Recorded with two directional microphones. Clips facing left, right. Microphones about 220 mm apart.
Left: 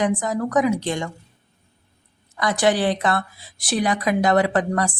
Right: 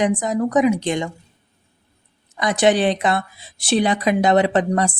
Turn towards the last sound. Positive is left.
turn(degrees=-20)  # may be behind; listen again after turning